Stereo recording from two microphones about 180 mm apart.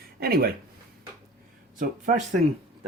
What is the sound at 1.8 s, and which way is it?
Speech, 45° right (ahead or behind).